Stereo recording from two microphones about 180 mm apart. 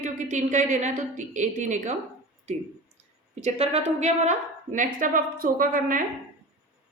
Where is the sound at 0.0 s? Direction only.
45° right (ahead or behind).